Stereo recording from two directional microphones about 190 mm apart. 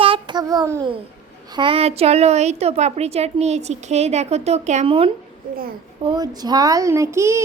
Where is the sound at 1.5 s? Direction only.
30° right (ahead or behind).